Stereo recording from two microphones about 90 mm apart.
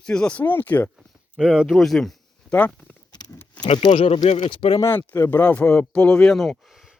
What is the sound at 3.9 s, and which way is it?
Speech, 90° left.